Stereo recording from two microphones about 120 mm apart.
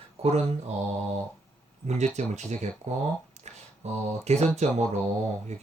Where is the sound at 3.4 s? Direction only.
70° right (ahead or behind).